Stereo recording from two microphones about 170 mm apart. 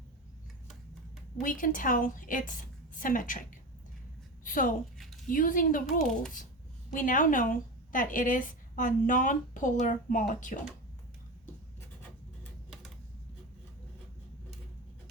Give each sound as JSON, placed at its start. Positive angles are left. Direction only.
{"t": 1.4, "sound": "a woman's voice", "side_deg": 50}
{"t": 4.4, "sound": "a woman's voice", "side_deg": 50}